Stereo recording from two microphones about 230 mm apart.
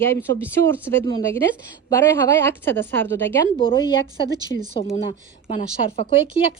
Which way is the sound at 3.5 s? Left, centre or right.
Left.